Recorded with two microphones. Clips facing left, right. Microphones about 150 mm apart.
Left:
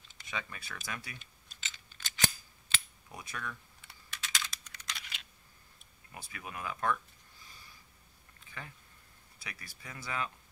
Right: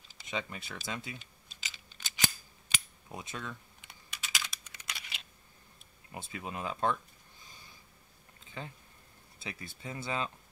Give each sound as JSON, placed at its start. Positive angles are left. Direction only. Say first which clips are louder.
{"t": 0.3, "sound": "speech", "louder": "right 4 dB", "side_deg": -20}
{"t": 1.6, "sound": "scissors", "louder": "even", "side_deg": -15}
{"t": 2.7, "sound": "computer keyboard", "louder": "right 2 dB", "side_deg": -25}
{"t": 6.1, "sound": "speech", "louder": "right 4 dB", "side_deg": -25}
{"t": 8.5, "sound": "speech", "louder": "right 4 dB", "side_deg": -25}